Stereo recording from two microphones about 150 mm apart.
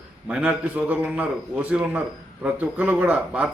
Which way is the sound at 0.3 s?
10° right (ahead or behind).